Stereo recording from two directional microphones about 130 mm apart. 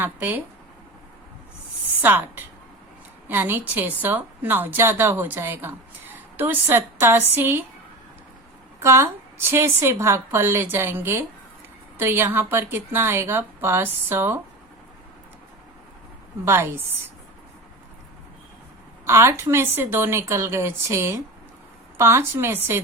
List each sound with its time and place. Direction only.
0.0 s a woman's voice: 15° right (ahead or behind)
2.0 s a woman's voice: 15° right (ahead or behind)
8.8 s a woman's voice: 20° right (ahead or behind)
16.5 s a woman's voice: 20° right (ahead or behind)
19.0 s a woman's voice: 20° right (ahead or behind)